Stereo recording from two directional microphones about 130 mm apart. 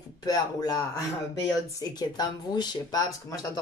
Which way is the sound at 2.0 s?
30° left (ahead or behind).